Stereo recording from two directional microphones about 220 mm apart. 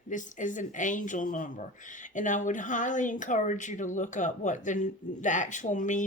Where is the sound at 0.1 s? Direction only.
35° left (ahead or behind).